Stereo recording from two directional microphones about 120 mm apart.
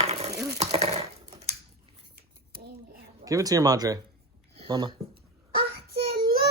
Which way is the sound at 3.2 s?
30° right (ahead or behind).